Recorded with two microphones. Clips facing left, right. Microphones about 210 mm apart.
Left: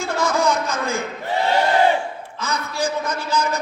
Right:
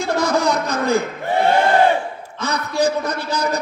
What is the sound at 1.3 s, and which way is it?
Battle cry, 55° right (ahead or behind).